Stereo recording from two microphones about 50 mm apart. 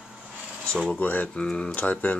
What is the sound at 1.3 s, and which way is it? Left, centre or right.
Speech, centre.